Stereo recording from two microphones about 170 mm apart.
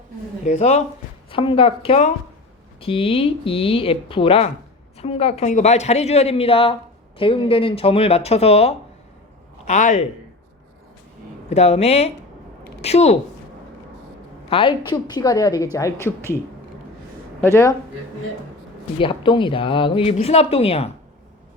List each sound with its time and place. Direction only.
0.4 s speech: 40° left (ahead or behind)
1.3 s a man's voice: 30° left (ahead or behind)
11.4 s speech: 40° left (ahead or behind)
14.5 s a woman's voice: 30° left (ahead or behind); by 16.4 s 15° left (ahead or behind)
17.4 s speech: 15° left (ahead or behind)
18.9 s speech: 30° left (ahead or behind)